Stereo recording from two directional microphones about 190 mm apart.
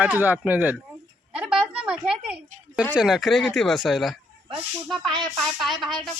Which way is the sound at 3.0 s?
Centre (ahead or behind).